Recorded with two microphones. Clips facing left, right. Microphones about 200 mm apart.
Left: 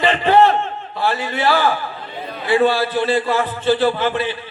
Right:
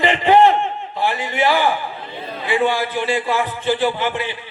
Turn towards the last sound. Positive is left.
turn(degrees=-15)  # may be behind; listen again after turning